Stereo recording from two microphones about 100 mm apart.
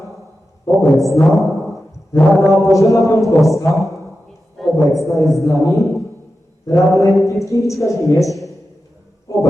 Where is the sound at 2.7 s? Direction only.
30° left (ahead or behind).